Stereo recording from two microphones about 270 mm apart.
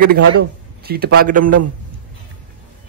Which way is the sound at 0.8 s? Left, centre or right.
Right.